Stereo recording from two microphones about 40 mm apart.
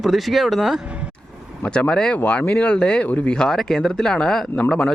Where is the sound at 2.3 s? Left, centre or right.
Left.